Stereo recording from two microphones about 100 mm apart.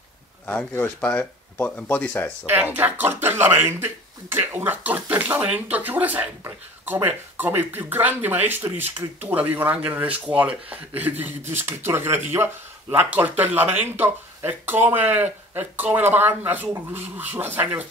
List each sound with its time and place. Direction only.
0.7 s speech: 15° left (ahead or behind)
2.4 s speech: 20° right (ahead or behind)